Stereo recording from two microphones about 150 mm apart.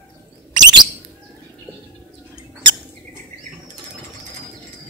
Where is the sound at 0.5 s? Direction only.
25° right (ahead or behind).